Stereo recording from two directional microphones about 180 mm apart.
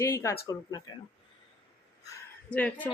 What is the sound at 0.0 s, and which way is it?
A woman's voice, 15° left (ahead or behind).